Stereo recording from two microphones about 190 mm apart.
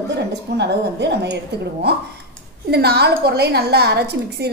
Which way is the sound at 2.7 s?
55° right (ahead or behind).